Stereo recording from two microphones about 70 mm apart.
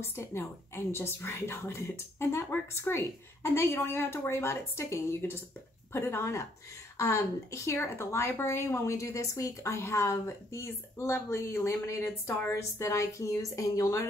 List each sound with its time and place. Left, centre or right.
0.0 s a woman's voice: left